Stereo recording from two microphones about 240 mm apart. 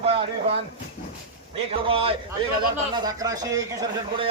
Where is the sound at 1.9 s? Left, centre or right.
Right.